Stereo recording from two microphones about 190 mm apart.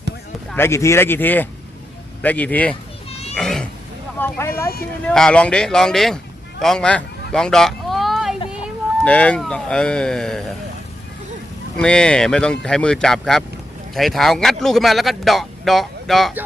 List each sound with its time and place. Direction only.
0.5 s speech: 15° left (ahead or behind)
3.1 s a sound: 35° left (ahead or behind)
3.3 s cat: 5° left (ahead or behind)
4.2 s a man's voice: 10° left (ahead or behind)
6.6 s a sound: 5° left (ahead or behind)
9.0 s a man's voice: 5° left (ahead or behind)
11.8 s a man's voice: 5° left (ahead or behind)